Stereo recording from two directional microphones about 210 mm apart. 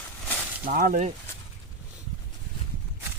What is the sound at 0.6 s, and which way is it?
Speech, 45° right (ahead or behind).